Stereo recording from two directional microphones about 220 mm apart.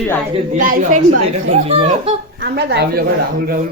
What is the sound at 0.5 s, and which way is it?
Speech, 35° right (ahead or behind).